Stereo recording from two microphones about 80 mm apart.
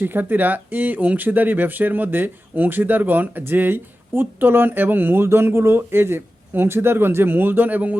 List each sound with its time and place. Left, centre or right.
0.0 s speech: right